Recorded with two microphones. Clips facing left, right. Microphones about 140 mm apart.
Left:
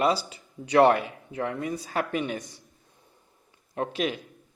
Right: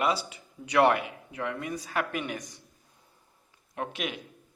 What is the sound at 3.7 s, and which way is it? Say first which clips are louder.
Speech: left 6 dB; 35° left (ahead or behind).